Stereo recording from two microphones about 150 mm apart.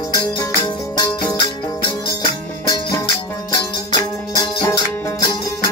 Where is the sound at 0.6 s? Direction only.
25° left (ahead or behind).